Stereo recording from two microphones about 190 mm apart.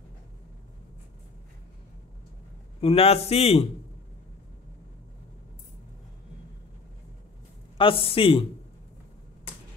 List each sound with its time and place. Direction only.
2.8 s a man's voice: 30° left (ahead or behind)
7.7 s speech: 30° left (ahead or behind)